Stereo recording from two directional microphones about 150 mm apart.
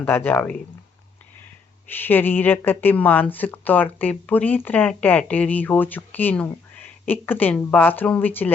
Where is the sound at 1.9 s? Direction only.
15° left (ahead or behind).